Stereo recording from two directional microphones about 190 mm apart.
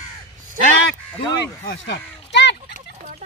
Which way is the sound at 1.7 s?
65° left (ahead or behind).